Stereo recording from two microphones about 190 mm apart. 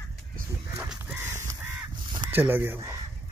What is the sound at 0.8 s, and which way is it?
Crow, 10° right (ahead or behind).